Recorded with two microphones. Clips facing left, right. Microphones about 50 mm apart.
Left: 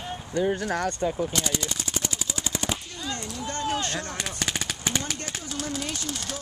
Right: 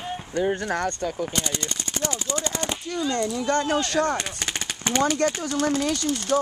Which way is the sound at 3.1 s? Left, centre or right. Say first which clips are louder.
Right 9 dB; right.